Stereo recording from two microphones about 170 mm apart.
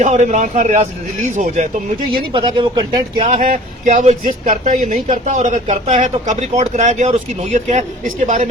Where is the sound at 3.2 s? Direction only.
50° right (ahead or behind).